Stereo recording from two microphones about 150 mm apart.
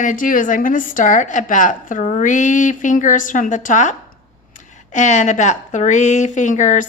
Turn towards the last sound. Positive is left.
turn(degrees=55)  # may be behind; listen again after turning